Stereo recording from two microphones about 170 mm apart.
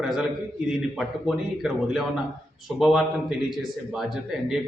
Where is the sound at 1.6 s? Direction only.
Centre (ahead or behind).